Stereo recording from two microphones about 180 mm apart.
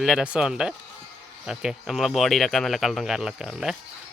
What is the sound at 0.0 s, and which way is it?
Speech, 5° right (ahead or behind).